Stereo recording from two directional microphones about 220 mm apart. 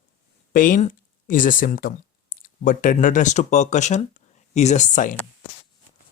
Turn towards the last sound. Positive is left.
turn(degrees=35)  # may be behind; listen again after turning